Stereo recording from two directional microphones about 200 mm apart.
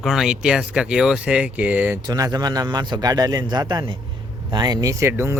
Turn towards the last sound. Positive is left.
turn(degrees=-15)  # may be behind; listen again after turning